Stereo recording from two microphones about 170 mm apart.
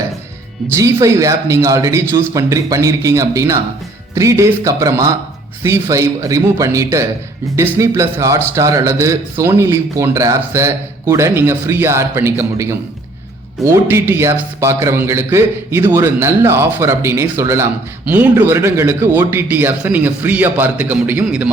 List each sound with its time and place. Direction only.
0.8 s a man's voice: 15° right (ahead or behind)